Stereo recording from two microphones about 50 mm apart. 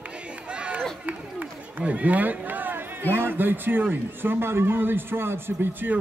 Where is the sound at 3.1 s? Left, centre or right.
Right.